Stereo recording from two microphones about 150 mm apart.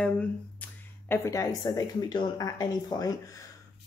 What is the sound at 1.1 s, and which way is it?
Speech, 20° left (ahead or behind).